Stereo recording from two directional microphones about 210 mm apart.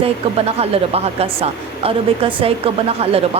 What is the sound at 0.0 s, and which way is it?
Speech, 30° right (ahead or behind).